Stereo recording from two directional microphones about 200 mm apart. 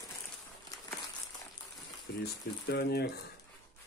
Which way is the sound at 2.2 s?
55° left (ahead or behind).